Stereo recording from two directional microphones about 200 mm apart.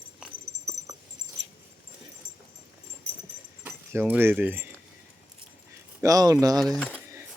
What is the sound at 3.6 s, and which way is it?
Speech, 10° right (ahead or behind).